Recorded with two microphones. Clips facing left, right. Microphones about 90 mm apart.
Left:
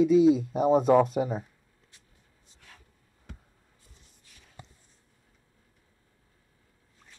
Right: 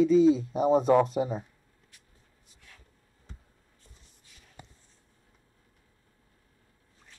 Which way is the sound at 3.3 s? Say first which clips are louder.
Left 4 dB; 65° left (ahead or behind).